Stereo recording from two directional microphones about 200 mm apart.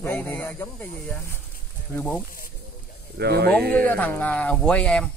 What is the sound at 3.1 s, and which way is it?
Speech, 55° right (ahead or behind).